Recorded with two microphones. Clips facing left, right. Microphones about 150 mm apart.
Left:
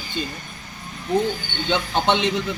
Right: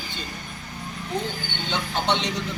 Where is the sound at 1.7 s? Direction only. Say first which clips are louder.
Left 5 dB; 90° left.